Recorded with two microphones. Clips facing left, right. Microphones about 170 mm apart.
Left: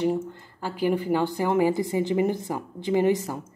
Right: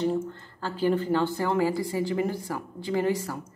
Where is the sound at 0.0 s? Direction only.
15° left (ahead or behind).